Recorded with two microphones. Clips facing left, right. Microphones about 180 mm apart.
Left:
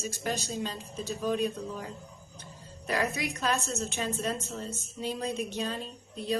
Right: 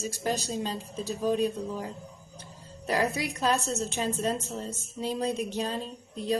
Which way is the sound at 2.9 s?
35° right (ahead or behind).